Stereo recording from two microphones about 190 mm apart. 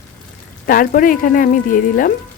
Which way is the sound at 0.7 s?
50° left (ahead or behind).